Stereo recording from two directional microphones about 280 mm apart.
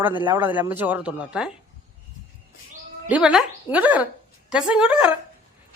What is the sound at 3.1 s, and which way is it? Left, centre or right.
Speech, centre.